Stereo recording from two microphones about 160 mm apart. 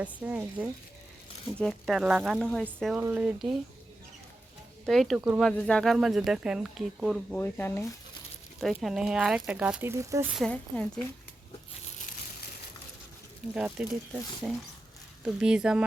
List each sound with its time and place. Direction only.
0.0 s speech: 10° right (ahead or behind)
1.5 s speech: centre (ahead or behind)
2.9 s speech: 10° right (ahead or behind)
4.9 s speech: centre (ahead or behind)
7.3 s speech: 10° left (ahead or behind)
8.8 s speech: 5° right (ahead or behind)
9.9 s speech: 20° right (ahead or behind)
10.3 s speech: 5° left (ahead or behind)
13.5 s speech: 5° right (ahead or behind)